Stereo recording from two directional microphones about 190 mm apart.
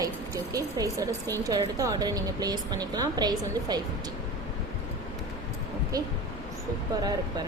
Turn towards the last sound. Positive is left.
turn(degrees=-20)  # may be behind; listen again after turning